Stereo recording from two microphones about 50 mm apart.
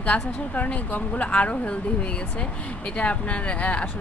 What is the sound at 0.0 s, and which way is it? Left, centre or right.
Speech, left.